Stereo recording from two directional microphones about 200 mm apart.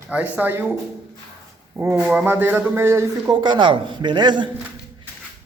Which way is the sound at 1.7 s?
10° right (ahead or behind).